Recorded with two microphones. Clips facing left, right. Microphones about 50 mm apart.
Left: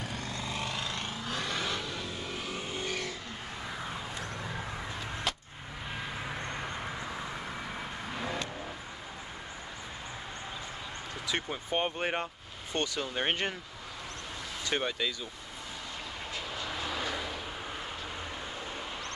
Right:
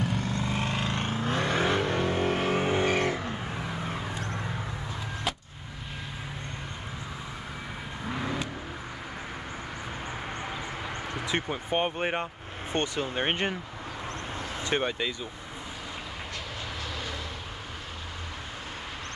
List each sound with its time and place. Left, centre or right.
0.0 s vehicle: right
3.6 s vehicle: right
8.1 s vehicle: centre
11.2 s speech: right
12.7 s speech: right
14.7 s speech: right
16.8 s vehicle: centre